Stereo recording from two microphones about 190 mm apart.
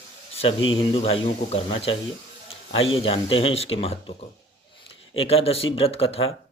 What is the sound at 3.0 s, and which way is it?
Speech, 30° left (ahead or behind).